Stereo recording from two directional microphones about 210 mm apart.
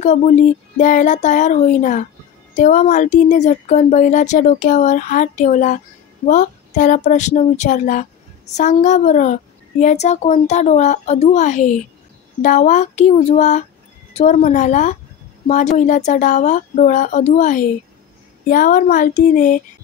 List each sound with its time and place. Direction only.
0.0 s speech: 35° left (ahead or behind)